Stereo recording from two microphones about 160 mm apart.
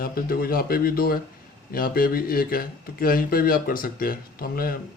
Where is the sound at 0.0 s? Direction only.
70° left (ahead or behind).